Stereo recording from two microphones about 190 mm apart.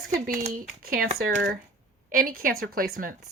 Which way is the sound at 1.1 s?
70° right (ahead or behind).